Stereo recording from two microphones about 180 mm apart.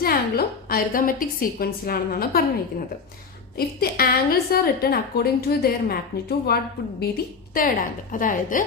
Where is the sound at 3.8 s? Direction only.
55° left (ahead or behind).